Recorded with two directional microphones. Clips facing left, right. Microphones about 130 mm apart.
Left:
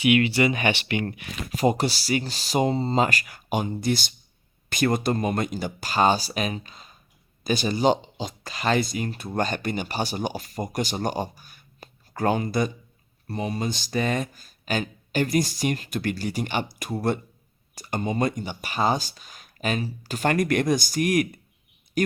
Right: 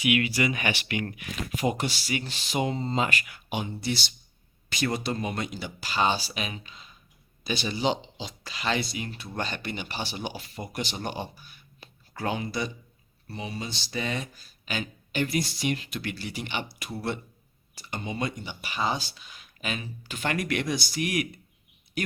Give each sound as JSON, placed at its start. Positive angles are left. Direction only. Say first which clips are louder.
{"t": 0.0, "sound": "speech", "louder": "left 5 dB", "side_deg": 30}